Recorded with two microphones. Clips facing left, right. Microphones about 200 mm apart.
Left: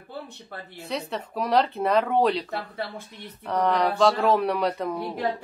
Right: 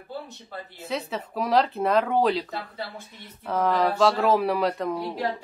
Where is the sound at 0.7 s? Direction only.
Centre (ahead or behind).